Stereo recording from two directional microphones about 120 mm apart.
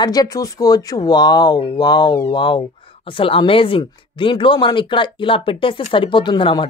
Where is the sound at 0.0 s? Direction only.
35° left (ahead or behind).